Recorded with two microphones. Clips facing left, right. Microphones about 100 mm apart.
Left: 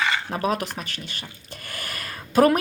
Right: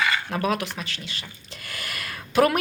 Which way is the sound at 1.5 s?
40° left (ahead or behind).